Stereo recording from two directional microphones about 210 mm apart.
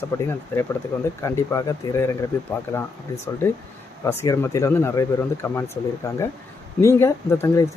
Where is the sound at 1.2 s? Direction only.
15° left (ahead or behind).